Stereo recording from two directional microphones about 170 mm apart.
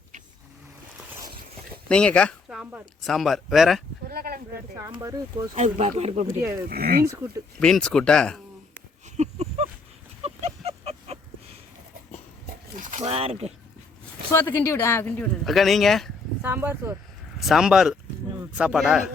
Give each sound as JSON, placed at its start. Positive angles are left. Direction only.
{"t": 1.9, "sound": "speech", "side_deg": 5}
{"t": 2.5, "sound": "a sound", "side_deg": -5}
{"t": 3.0, "sound": "speech", "side_deg": 0}
{"t": 4.1, "sound": "speech", "side_deg": -65}
{"t": 4.9, "sound": "speech", "side_deg": -15}
{"t": 5.5, "sound": "speech", "side_deg": -40}
{"t": 6.7, "sound": "speech", "side_deg": -60}
{"t": 7.0, "sound": "speech", "side_deg": -15}
{"t": 7.6, "sound": "speech", "side_deg": 5}
{"t": 9.1, "sound": "a sound", "side_deg": -40}
{"t": 12.7, "sound": "speech", "side_deg": -45}
{"t": 14.3, "sound": "speech", "side_deg": 15}
{"t": 16.4, "sound": "speech", "side_deg": -10}
{"t": 17.4, "sound": "speech", "side_deg": 0}